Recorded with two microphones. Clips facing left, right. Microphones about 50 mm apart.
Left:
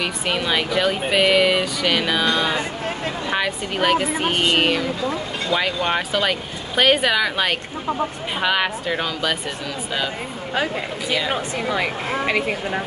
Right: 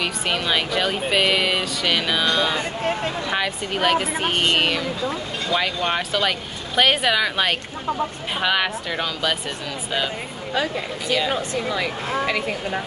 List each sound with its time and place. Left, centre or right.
0.0 s speech: centre
11.3 s speech: left